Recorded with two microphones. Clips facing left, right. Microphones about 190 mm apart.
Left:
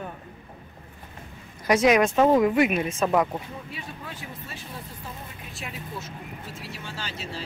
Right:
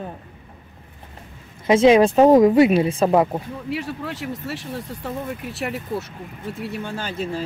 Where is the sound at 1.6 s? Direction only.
25° right (ahead or behind).